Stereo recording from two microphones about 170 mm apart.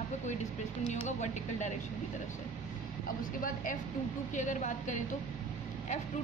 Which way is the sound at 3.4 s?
50° left (ahead or behind).